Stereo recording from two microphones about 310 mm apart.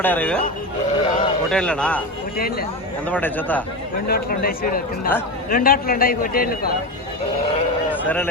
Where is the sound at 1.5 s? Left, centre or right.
Centre.